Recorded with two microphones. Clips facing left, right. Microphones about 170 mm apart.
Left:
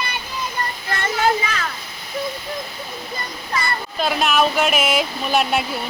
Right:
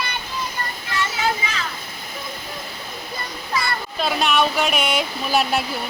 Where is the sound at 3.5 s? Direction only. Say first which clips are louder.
Even; centre (ahead or behind).